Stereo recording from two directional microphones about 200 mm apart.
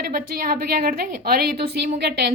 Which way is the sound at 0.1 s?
45° right (ahead or behind).